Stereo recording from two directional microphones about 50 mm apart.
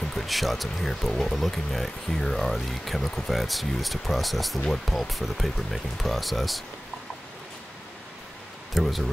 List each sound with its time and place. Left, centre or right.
0.1 s speech: centre
8.7 s speech: centre